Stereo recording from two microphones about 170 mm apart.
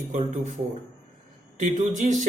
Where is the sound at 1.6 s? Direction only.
45° right (ahead or behind).